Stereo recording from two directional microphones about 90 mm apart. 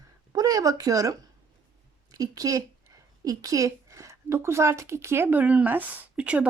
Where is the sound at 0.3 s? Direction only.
40° right (ahead or behind).